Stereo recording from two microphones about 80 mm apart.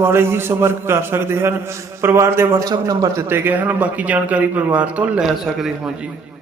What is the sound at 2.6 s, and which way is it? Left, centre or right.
Speech, right.